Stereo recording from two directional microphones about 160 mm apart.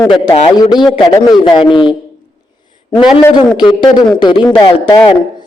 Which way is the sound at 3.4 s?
30° left (ahead or behind).